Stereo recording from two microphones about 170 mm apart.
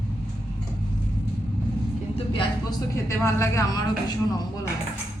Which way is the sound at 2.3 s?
20° left (ahead or behind).